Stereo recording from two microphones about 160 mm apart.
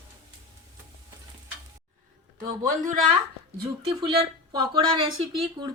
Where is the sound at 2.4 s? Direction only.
60° right (ahead or behind).